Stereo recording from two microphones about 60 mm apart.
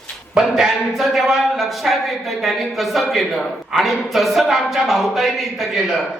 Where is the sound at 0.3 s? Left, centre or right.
Centre.